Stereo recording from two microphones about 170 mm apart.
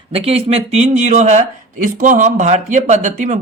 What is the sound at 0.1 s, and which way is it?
Speech, 35° right (ahead or behind).